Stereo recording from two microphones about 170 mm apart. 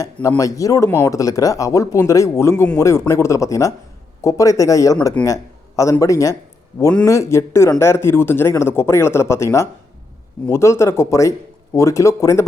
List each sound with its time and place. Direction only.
0.0 s speech: 20° left (ahead or behind)